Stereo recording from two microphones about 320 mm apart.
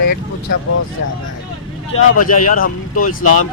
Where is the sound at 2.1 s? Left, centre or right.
Left.